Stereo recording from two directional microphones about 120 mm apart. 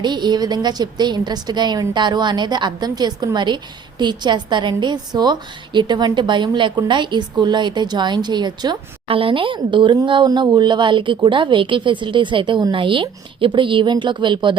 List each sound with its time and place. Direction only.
0.0 s a woman's voice: 40° right (ahead or behind)
9.0 s a woman's voice: 50° right (ahead or behind)